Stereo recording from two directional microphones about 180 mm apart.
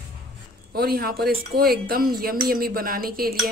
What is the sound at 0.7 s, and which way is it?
Speech, 60° right (ahead or behind).